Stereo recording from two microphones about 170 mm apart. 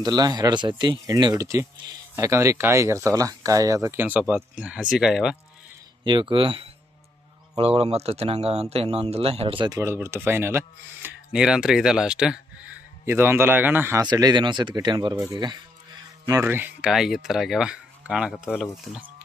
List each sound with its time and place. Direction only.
0.0 s speech: 25° right (ahead or behind); by 5.4 s centre (ahead or behind)
6.0 s speech: 30° right (ahead or behind)
9.7 s speech: 15° right (ahead or behind)
14.0 s speech: 25° right (ahead or behind); by 18.5 s 5° right (ahead or behind)